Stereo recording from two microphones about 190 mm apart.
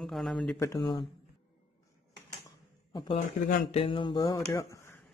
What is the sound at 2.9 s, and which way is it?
Speech, 25° left (ahead or behind).